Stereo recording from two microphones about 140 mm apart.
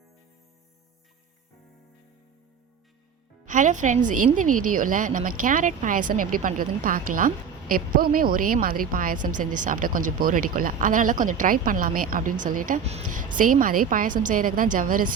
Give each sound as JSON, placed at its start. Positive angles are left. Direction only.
{"t": 3.4, "sound": "a woman's voice", "side_deg": -65}
{"t": 12.8, "sound": "a woman's voice", "side_deg": -50}
{"t": 13.1, "sound": "a woman's voice", "side_deg": -70}